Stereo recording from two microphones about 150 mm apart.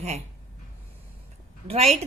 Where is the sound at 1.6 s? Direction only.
45° right (ahead or behind).